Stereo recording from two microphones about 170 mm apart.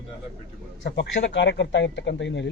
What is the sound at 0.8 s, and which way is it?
Speech, 90° left.